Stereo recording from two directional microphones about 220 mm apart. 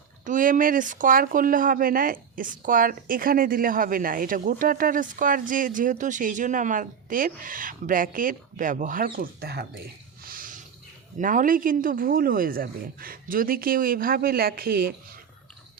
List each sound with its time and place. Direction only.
0.3 s speech: 35° right (ahead or behind)
10.2 s a sound: 40° right (ahead or behind)
11.2 s speech: 35° right (ahead or behind)